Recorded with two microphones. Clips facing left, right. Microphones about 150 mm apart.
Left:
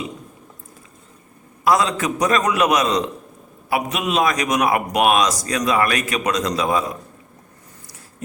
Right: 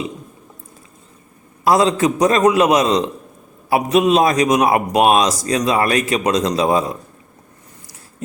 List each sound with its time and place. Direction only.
1.6 s a man's voice: 30° right (ahead or behind)